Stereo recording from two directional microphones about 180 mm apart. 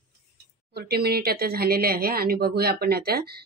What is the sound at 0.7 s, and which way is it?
A woman's voice, 60° right (ahead or behind).